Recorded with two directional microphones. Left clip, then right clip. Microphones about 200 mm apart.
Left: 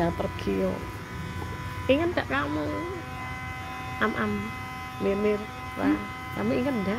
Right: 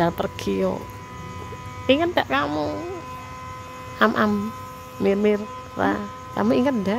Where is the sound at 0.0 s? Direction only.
50° right (ahead or behind).